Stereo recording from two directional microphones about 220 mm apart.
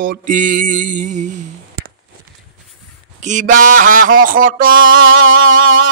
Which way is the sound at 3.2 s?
35° right (ahead or behind).